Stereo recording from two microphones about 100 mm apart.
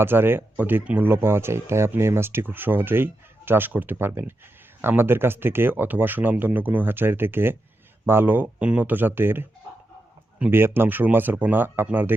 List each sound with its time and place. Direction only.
0.0 s speech: 20° right (ahead or behind)